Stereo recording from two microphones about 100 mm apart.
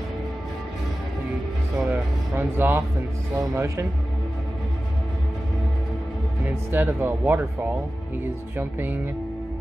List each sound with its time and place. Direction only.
1.8 s music: 20° right (ahead or behind)
3.3 s speech: 30° right (ahead or behind)
6.4 s speech: 20° right (ahead or behind)
8.5 s speech: 20° right (ahead or behind)